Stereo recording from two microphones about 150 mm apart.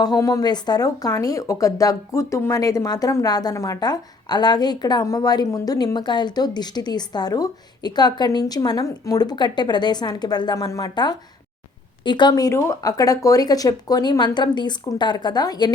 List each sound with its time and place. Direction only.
0.0 s speech: 25° left (ahead or behind)